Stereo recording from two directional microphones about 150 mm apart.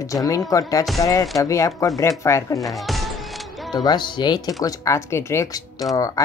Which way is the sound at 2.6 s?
Centre (ahead or behind).